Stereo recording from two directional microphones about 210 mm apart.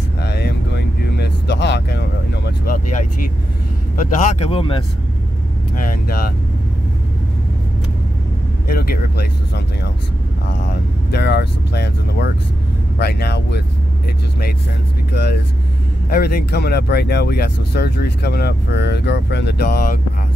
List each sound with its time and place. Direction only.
0.2 s a sound: 50° left (ahead or behind)
3.9 s speech: 40° left (ahead or behind)
5.8 s speech: 40° left (ahead or behind)
8.6 s speech: 45° left (ahead or behind)
10.7 s speech: 50° left (ahead or behind)
16.1 s speech: 50° left (ahead or behind)